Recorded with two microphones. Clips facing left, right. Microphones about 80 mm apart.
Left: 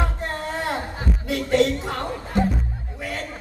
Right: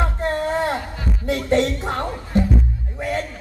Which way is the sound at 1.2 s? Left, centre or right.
Right.